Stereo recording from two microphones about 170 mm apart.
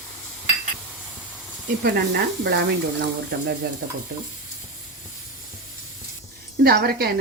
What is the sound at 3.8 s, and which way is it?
Speech, 75° right (ahead or behind).